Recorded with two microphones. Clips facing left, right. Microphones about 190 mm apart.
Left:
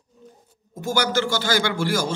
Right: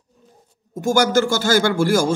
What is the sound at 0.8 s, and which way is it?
Speech, 45° right (ahead or behind).